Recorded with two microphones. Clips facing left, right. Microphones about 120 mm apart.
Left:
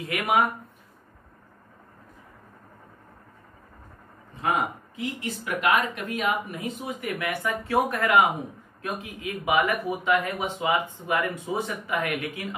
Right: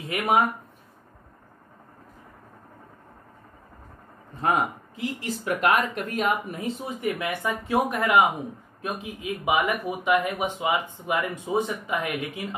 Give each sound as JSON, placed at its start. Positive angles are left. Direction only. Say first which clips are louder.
{"t": 0.0, "sound": "speech", "louder": "right 1 dB", "side_deg": -25}
{"t": 4.4, "sound": "speech", "louder": "right 2 dB", "side_deg": -40}
{"t": 9.2, "sound": "speech", "louder": "even", "side_deg": -15}